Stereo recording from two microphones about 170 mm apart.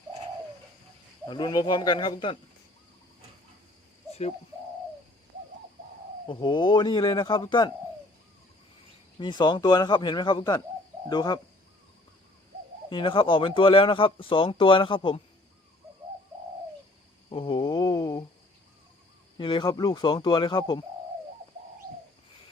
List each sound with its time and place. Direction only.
1.3 s speech: 25° left (ahead or behind)
4.1 s bird: 35° left (ahead or behind)
6.2 s speech: 25° left (ahead or behind)
9.1 s speech: 25° left (ahead or behind)
12.9 s speech: 30° left (ahead or behind)
17.2 s a sound: 30° left (ahead or behind)
19.4 s speech: 25° left (ahead or behind)